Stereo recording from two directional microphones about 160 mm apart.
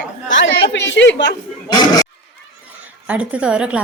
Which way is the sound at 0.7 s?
90° left.